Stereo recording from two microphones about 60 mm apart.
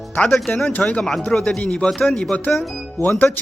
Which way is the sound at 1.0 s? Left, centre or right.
Centre.